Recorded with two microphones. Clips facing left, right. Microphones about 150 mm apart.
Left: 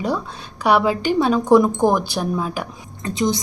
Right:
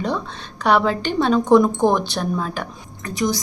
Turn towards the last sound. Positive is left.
turn(degrees=25)  # may be behind; listen again after turning